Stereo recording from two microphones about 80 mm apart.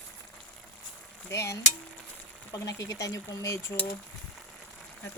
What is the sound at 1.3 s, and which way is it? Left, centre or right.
Speech, left.